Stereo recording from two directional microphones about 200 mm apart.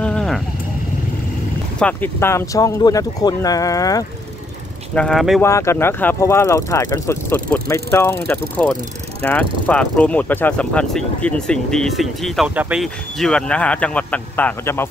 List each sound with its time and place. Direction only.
0.0 s sheep: 5° left (ahead or behind)
1.8 s speech: 10° left (ahead or behind)
4.9 s speech: centre (ahead or behind)
5.4 s speech: 15° left (ahead or behind)